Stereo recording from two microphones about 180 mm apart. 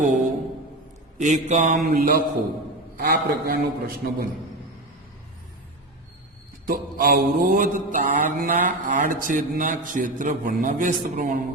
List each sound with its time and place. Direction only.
1.2 s mantra: 45° right (ahead or behind)
6.7 s mantra: 55° right (ahead or behind)